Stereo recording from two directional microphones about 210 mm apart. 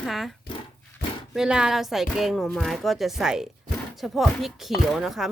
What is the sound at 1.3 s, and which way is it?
Speech, 5° right (ahead or behind).